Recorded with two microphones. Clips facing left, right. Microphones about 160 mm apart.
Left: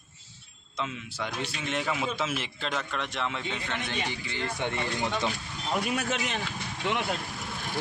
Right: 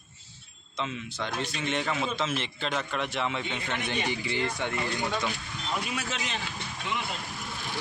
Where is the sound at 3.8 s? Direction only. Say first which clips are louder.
Right 3 dB; 15° right (ahead or behind).